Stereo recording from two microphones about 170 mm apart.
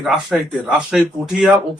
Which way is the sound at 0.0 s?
Centre (ahead or behind).